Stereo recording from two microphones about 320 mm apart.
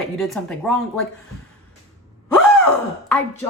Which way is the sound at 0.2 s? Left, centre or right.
Centre.